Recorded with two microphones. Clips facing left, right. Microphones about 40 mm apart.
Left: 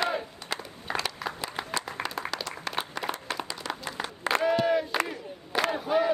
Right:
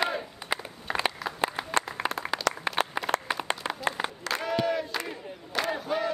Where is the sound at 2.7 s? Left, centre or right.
Right.